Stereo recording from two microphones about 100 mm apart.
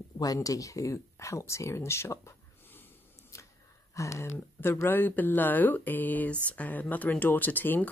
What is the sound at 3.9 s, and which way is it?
Speech, 30° left (ahead or behind).